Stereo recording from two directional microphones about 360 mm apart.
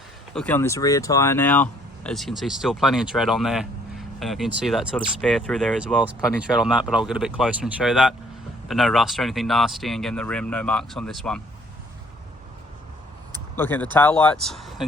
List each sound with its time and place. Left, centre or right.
0.3 s speech: centre
13.6 s speech: centre